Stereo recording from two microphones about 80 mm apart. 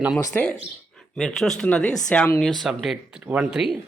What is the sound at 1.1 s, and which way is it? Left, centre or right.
Speech, centre.